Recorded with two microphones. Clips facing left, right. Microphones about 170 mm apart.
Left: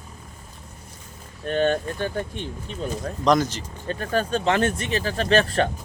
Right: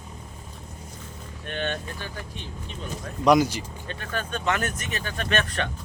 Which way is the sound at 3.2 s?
10° right (ahead or behind).